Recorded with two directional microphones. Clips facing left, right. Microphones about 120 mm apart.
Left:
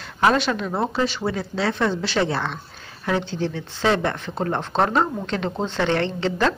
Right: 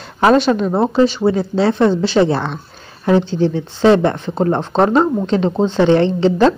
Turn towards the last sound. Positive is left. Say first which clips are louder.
# right 9 dB
turn(degrees=-20)  # may be behind; listen again after turning